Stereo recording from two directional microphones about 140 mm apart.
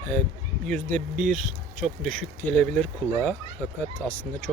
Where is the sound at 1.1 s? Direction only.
Centre (ahead or behind).